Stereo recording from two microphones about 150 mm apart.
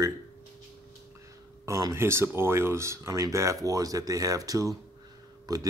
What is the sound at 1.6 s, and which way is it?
Speech, 20° right (ahead or behind).